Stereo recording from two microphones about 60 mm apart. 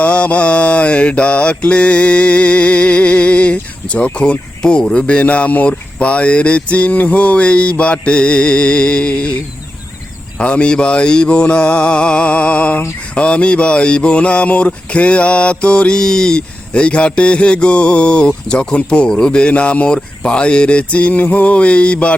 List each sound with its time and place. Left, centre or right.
0.0 s mantra: left